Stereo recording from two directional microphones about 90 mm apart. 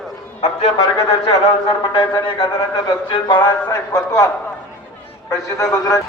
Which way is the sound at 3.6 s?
40° left (ahead or behind).